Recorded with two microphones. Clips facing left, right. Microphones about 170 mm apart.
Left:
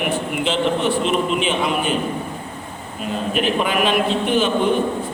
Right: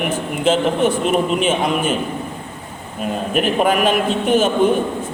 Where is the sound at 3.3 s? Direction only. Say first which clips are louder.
Right 4 dB; 45° right (ahead or behind).